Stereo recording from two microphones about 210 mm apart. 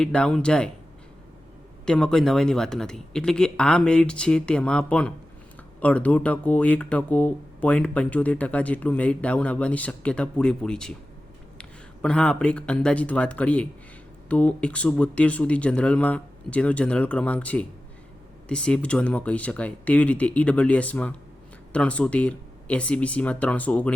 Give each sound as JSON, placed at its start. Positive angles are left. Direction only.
{"t": 0.0, "sound": "speech", "side_deg": 5}
{"t": 1.8, "sound": "speech", "side_deg": 5}
{"t": 12.0, "sound": "speech", "side_deg": 5}